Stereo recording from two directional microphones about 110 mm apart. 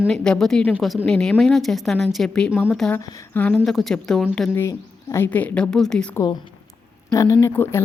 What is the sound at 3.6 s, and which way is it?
Speech, centre (ahead or behind).